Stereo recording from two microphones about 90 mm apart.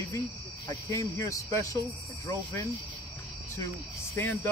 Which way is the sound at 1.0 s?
35° left (ahead or behind).